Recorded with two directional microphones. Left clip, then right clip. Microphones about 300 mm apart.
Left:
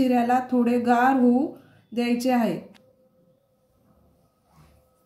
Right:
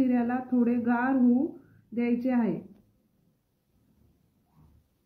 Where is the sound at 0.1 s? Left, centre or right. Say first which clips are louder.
Left 7 dB; left.